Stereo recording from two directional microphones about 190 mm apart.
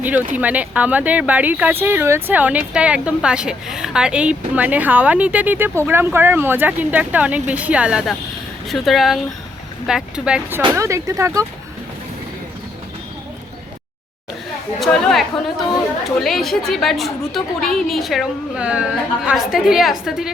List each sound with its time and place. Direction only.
0.0 s a woman's voice: 10° right (ahead or behind)
10.6 s speech: 15° right (ahead or behind)
14.8 s chatter: centre (ahead or behind)
16.2 s a woman's voice: centre (ahead or behind)